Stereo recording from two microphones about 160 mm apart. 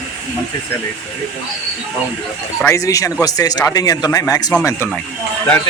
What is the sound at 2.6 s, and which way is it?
Speech, 20° left (ahead or behind).